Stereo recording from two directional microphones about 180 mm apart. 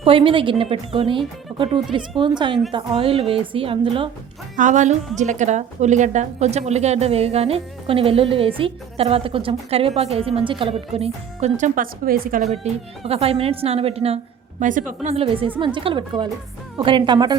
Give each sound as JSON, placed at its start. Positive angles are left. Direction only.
{"t": 0.0, "sound": "a woman's voice", "side_deg": -30}
{"t": 4.5, "sound": "a woman's voice", "side_deg": -45}
{"t": 12.6, "sound": "a woman's voice", "side_deg": -35}
{"t": 14.6, "sound": "a woman's voice", "side_deg": -45}
{"t": 15.1, "sound": "a woman's voice", "side_deg": -30}